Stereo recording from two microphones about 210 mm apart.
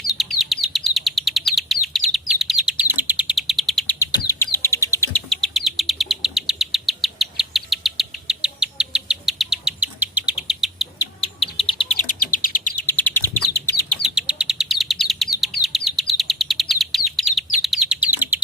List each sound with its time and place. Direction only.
0.1 s bird: centre (ahead or behind)
2.1 s chirp: centre (ahead or behind)
3.9 s bird: 15° left (ahead or behind); by 10.8 s centre (ahead or behind)
11.2 s bird: 25° left (ahead or behind)
11.9 s bird: 40° left (ahead or behind)
12.8 s chirp: 10° left (ahead or behind)
13.9 s bird: centre (ahead or behind)
15.6 s chirp: centre (ahead or behind)